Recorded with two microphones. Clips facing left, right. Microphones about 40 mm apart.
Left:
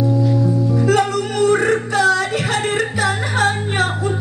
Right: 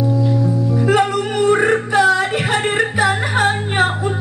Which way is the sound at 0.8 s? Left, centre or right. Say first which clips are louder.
Right 2 dB; right.